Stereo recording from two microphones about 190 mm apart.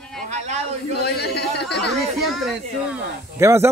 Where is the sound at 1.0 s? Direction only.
60° left (ahead or behind).